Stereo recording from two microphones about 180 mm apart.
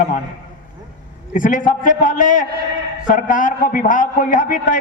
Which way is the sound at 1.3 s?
45° left (ahead or behind).